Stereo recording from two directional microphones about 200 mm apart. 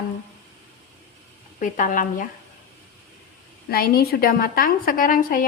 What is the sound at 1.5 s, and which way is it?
Speech, 40° left (ahead or behind).